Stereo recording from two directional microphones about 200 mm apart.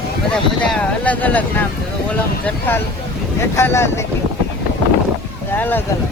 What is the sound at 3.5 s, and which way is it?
Speech, 10° left (ahead or behind).